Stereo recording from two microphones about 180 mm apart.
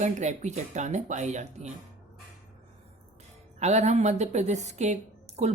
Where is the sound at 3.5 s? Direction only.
40° right (ahead or behind).